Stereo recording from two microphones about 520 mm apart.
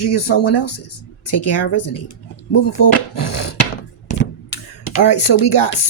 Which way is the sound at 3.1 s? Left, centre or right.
Left.